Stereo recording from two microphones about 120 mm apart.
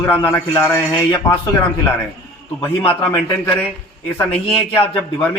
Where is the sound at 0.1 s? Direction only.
20° left (ahead or behind).